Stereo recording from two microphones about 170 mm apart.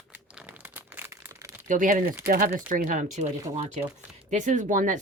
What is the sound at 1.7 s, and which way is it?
Speech, 50° right (ahead or behind).